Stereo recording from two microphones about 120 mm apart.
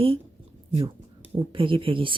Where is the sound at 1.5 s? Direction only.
45° right (ahead or behind).